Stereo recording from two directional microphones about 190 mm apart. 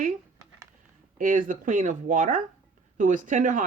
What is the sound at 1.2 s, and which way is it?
Speech, 45° right (ahead or behind).